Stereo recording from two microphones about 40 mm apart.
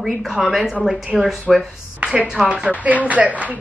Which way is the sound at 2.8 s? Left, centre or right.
Right.